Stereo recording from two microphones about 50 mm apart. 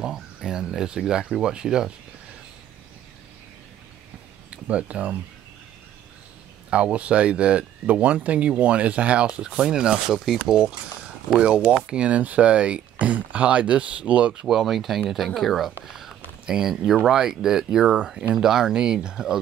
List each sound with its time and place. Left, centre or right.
0.0 s speech: centre
4.5 s speech: right
6.7 s speech: right; by 10.6 s centre
11.3 s speech: right
14.4 s speech: centre